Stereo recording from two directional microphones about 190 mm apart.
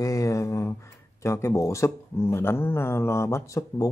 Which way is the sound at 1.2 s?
15° left (ahead or behind).